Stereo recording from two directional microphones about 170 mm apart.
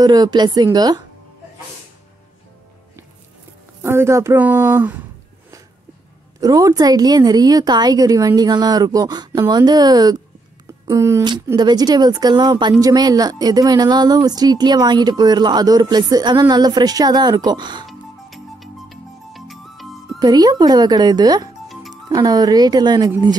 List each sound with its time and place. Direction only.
0.0 s speech: 20° right (ahead or behind)
3.8 s speech: 15° right (ahead or behind)
6.4 s speech: 20° right (ahead or behind)
17.8 s music: centre (ahead or behind)
20.2 s speech: 25° right (ahead or behind)